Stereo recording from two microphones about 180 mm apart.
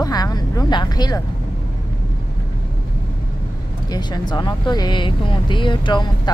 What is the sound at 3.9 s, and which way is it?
Speech, 25° left (ahead or behind).